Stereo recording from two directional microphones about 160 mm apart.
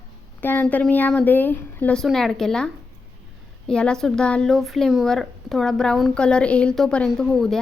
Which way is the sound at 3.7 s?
5° left (ahead or behind).